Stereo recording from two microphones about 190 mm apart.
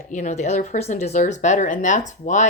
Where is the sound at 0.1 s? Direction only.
40° left (ahead or behind).